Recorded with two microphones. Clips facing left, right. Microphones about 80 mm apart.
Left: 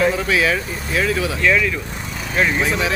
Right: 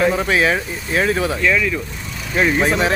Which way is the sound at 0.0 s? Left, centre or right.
Right.